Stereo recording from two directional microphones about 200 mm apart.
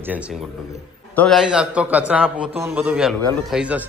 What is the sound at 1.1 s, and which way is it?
A man's voice, 5° left (ahead or behind).